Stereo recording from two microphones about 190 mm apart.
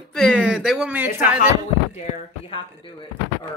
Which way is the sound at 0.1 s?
Centre (ahead or behind).